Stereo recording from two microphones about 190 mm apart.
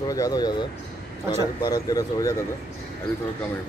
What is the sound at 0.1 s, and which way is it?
A man's voice, 20° left (ahead or behind).